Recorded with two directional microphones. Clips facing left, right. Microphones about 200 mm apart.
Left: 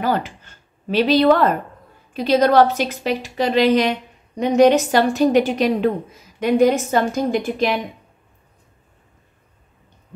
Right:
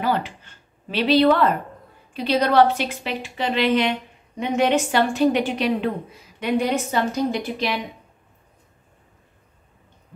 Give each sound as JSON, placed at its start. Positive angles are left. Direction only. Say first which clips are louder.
{"t": 0.0, "sound": "a woman's voice", "louder": "left 2 dB", "side_deg": 45}